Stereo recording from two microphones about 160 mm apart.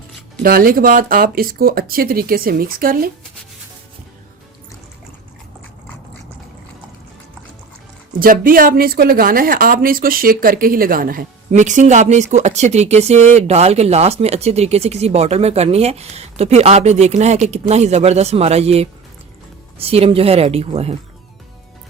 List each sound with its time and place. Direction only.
0.4 s speech: 65° right (ahead or behind)
8.2 s a woman's voice: 60° right (ahead or behind); by 20.9 s 40° right (ahead or behind)